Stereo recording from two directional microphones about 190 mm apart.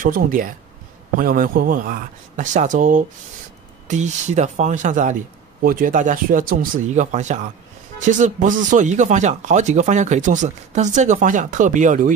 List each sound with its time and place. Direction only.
0.0 s speech: 45° right (ahead or behind)